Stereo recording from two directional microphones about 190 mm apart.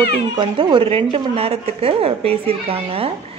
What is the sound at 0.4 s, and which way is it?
Speech, 25° right (ahead or behind).